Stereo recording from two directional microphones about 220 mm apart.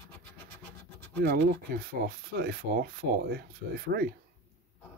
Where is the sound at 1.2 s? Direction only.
40° right (ahead or behind).